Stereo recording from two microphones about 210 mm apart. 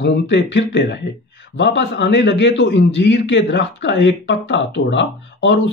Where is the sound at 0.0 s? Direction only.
55° left (ahead or behind).